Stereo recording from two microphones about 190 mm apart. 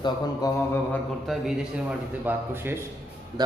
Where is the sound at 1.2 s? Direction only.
Centre (ahead or behind).